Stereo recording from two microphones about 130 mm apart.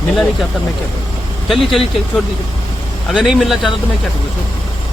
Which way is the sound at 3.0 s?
5° right (ahead or behind).